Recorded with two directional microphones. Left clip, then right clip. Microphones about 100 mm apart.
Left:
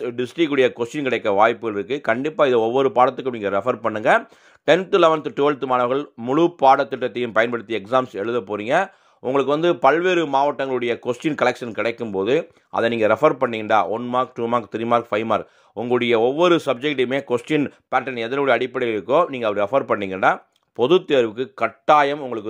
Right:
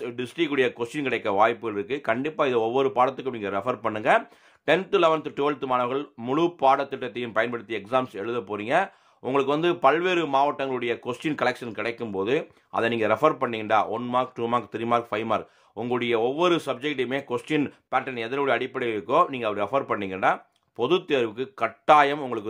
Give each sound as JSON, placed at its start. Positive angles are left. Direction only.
{"t": 0.0, "sound": "a man's voice", "side_deg": 45}
{"t": 8.0, "sound": "a man's voice", "side_deg": 40}
{"t": 14.1, "sound": "a man's voice", "side_deg": 35}
{"t": 21.8, "sound": "a man's voice", "side_deg": 20}